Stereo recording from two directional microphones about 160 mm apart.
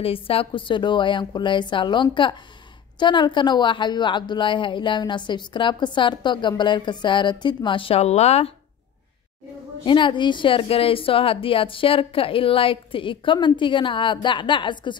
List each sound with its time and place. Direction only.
0.0 s a woman's voice: 35° left (ahead or behind)
9.8 s a woman's voice: 30° left (ahead or behind)